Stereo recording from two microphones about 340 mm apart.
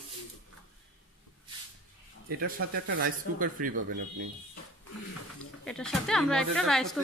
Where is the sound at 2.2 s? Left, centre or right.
Right.